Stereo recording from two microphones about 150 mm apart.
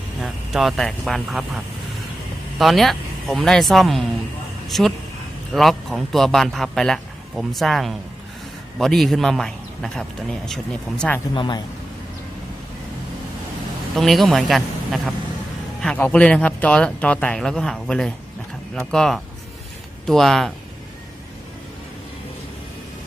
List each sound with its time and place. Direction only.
0.2 s a man's voice: centre (ahead or behind)
11.3 s a man's voice: 30° left (ahead or behind)
13.9 s a man's voice: centre (ahead or behind)